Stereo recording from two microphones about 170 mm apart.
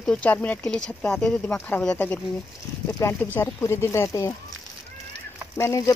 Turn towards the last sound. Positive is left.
turn(degrees=20)  # may be behind; listen again after turning